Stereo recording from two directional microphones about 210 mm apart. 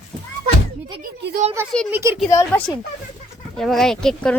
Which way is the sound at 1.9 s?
10° right (ahead or behind).